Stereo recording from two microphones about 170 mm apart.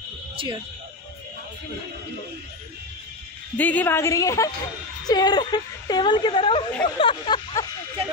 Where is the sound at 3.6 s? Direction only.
10° left (ahead or behind); by 6.6 s 30° left (ahead or behind).